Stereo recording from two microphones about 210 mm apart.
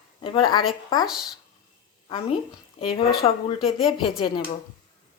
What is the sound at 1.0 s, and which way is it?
Speech, centre (ahead or behind).